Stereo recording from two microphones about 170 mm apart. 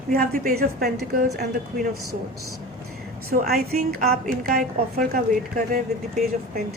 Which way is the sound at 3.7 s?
60° right (ahead or behind).